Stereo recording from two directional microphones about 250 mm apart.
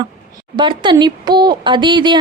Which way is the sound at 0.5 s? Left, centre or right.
Centre.